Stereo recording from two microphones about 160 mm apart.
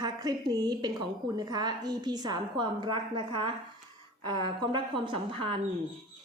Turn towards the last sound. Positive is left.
turn(degrees=-30)  # may be behind; listen again after turning